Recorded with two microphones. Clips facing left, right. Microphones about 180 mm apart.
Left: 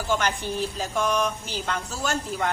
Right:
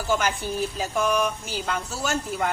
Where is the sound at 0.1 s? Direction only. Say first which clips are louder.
Right 1 dB; 10° right (ahead or behind).